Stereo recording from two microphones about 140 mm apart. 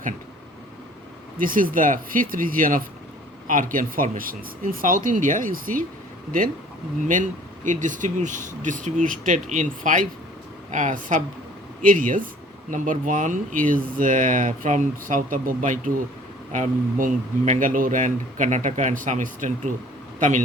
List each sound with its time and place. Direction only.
1.4 s speech: 85° right
7.1 s speech: 65° right (ahead or behind)
11.8 s a man's voice: 75° right (ahead or behind)